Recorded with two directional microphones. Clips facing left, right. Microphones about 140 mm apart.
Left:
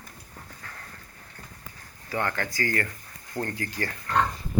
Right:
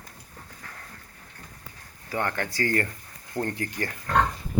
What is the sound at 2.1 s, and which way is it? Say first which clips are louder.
Speech: even; 20° right (ahead or behind).